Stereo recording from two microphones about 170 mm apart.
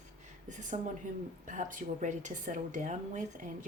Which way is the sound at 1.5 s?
50° right (ahead or behind).